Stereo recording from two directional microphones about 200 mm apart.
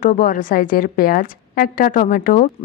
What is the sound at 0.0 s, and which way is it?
A woman's voice, 40° left (ahead or behind).